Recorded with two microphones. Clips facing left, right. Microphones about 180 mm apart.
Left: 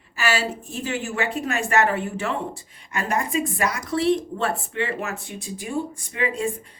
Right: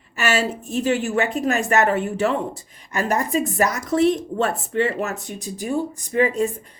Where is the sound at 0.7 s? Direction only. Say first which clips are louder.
Right 7 dB; 40° right (ahead or behind).